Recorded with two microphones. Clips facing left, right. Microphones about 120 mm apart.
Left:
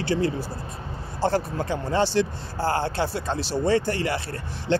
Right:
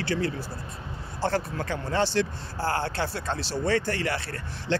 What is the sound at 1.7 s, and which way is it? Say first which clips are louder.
Speech: left 3 dB; 15° left (ahead or behind).